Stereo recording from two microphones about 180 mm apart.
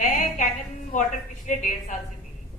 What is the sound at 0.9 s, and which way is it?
A woman's voice, 45° left (ahead or behind).